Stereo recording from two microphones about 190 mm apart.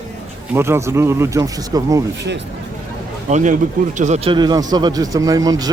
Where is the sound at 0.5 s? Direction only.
15° right (ahead or behind).